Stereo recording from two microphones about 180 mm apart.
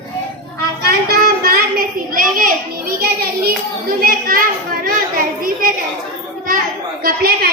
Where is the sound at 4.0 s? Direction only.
55° right (ahead or behind).